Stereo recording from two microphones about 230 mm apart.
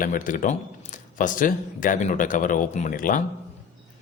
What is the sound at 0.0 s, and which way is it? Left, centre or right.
Speech, left.